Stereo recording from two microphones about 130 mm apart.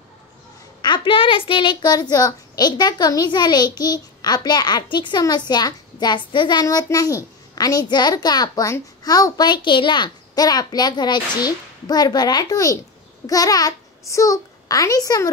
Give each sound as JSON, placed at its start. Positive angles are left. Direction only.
{"t": 0.8, "sound": "a child's voice", "side_deg": 40}